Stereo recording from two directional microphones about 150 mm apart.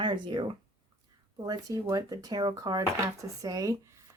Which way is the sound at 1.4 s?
25° right (ahead or behind).